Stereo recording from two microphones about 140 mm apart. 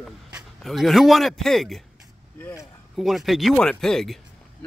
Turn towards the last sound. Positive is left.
turn(degrees=5)  # may be behind; listen again after turning